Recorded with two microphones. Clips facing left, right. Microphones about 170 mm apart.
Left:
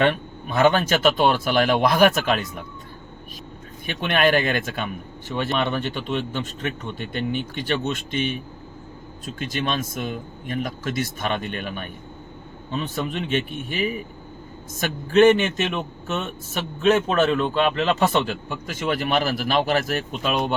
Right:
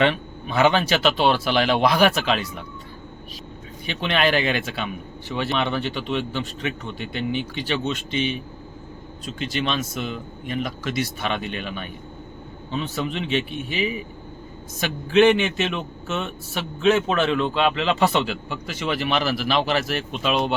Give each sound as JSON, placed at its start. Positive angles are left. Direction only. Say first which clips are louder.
{"t": 0.0, "sound": "a man's voice", "louder": "even", "side_deg": 45}
{"t": 3.8, "sound": "a man's voice", "louder": "left 1 dB", "side_deg": 50}